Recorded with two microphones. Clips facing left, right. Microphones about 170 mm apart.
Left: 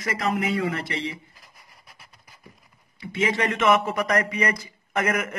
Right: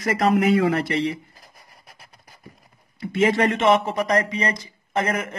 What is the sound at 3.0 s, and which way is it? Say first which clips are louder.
Speech: right 5 dB; 40° right (ahead or behind).